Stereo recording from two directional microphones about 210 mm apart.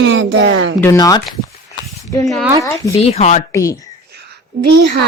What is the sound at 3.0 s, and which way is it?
Speech, 30° left (ahead or behind).